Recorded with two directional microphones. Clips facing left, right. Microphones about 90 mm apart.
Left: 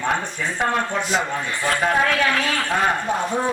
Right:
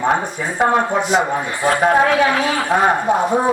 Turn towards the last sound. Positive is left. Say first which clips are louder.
# right 6 dB
turn(degrees=-20)  # may be behind; listen again after turning